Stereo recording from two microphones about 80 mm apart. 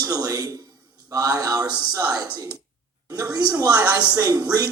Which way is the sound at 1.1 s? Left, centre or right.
Right.